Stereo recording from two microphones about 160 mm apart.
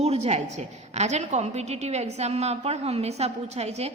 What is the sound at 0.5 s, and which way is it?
A woman's voice, 45° right (ahead or behind).